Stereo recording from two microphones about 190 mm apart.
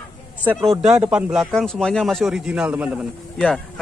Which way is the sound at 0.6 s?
5° right (ahead or behind).